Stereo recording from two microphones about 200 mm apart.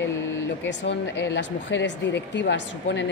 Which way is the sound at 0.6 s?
60° left (ahead or behind).